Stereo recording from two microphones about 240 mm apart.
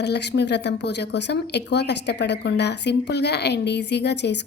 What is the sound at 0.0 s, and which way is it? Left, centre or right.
Speech, left.